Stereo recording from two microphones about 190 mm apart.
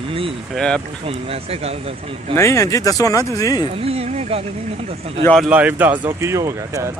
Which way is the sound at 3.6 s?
30° right (ahead or behind).